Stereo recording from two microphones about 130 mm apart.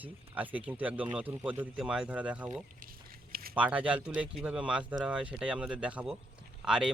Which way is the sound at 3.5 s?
10° right (ahead or behind).